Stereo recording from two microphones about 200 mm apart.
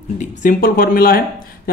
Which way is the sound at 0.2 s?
40° left (ahead or behind).